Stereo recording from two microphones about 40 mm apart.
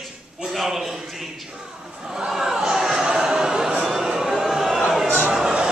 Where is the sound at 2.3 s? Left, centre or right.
Centre.